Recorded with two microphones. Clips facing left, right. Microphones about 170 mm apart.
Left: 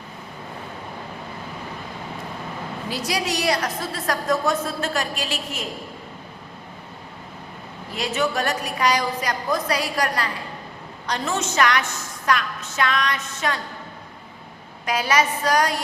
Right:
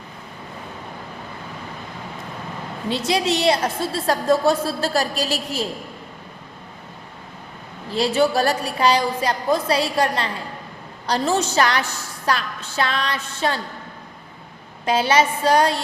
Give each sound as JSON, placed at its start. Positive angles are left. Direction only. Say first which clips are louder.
{"t": 2.9, "sound": "a woman's voice", "louder": "right 5 dB", "side_deg": -25}
{"t": 7.9, "sound": "a woman's voice", "louder": "right 6 dB", "side_deg": -30}
{"t": 14.8, "sound": "a woman's voice", "louder": "right 3 dB", "side_deg": -30}